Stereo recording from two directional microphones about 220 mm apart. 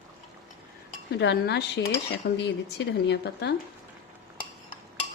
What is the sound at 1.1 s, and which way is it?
Speech, 50° left (ahead or behind).